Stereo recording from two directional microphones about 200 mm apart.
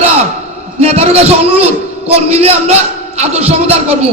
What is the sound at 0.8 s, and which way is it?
Music, 30° right (ahead or behind).